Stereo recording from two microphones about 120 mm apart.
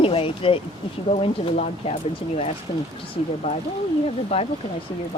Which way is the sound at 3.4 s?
50° left (ahead or behind).